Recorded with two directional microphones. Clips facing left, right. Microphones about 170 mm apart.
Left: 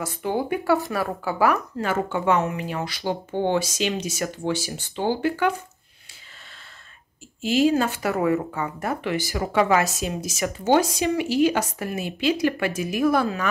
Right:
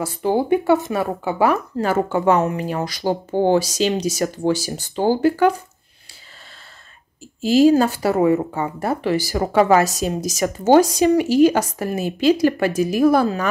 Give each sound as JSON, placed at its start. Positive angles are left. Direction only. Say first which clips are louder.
{"t": 0.0, "sound": "speech", "louder": "right 6 dB", "side_deg": -30}
{"t": 7.4, "sound": "speech", "louder": "right 6 dB", "side_deg": -35}
{"t": 8.2, "sound": "speech", "louder": "right 5 dB", "side_deg": -25}